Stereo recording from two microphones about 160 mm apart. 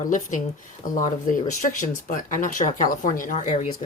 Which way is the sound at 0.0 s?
55° left (ahead or behind).